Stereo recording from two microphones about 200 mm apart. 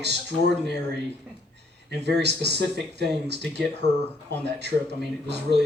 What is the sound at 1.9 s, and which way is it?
Speech, 55° right (ahead or behind).